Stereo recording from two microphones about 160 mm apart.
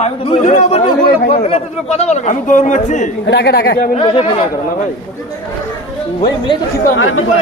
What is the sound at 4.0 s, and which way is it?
Speech, 35° left (ahead or behind).